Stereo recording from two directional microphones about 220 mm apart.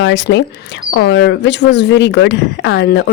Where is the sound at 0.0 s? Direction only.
55° left (ahead or behind).